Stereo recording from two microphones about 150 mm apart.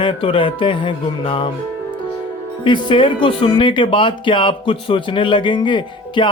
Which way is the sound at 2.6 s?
30° left (ahead or behind).